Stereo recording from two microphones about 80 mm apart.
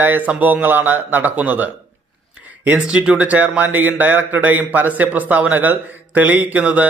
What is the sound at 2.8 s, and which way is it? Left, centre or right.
Speech, centre.